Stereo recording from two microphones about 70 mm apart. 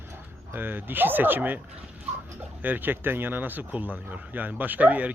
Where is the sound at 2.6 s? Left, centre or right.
Right.